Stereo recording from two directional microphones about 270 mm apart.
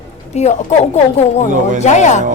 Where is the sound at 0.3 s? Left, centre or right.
Left.